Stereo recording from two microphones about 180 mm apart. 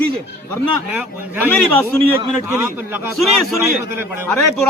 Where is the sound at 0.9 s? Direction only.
10° right (ahead or behind).